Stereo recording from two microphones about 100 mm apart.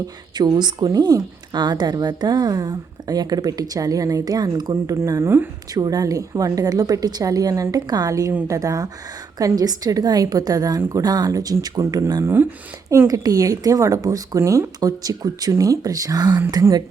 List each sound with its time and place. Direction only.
0.3 s a woman's voice: 45° right (ahead or behind)
12.2 s speech: 20° right (ahead or behind)
13.1 s a woman's voice: 35° right (ahead or behind)